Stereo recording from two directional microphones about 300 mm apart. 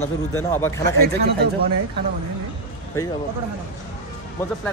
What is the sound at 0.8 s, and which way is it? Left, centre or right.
Speech, right.